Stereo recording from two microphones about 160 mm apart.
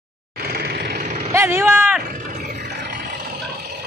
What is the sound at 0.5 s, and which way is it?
Vehicle, 85° right.